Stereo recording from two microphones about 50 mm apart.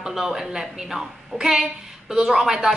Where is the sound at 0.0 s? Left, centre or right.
Centre.